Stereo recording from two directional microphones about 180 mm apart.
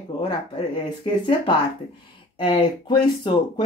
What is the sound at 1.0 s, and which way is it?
Speech, 30° left (ahead or behind).